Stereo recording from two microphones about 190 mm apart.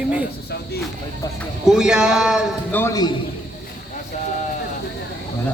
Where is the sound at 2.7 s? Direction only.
15° left (ahead or behind).